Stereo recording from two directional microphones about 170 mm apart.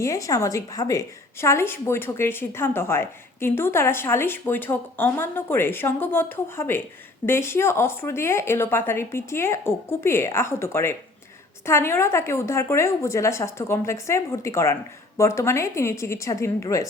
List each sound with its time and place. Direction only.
0.0 s a woman's voice: 20° left (ahead or behind)